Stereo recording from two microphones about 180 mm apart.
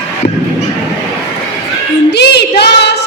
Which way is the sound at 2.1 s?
65° left (ahead or behind).